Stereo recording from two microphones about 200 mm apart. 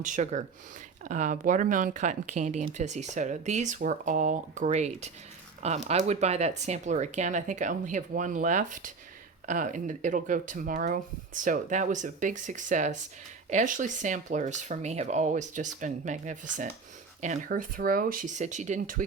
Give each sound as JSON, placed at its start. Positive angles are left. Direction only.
{"t": 0.0, "sound": "speech", "side_deg": -40}